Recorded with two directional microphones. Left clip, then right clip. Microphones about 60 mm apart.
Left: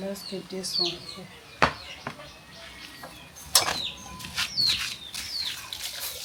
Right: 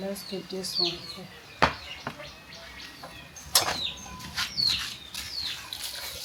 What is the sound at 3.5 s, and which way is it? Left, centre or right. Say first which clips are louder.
Mechanisms: left 1 dB; centre.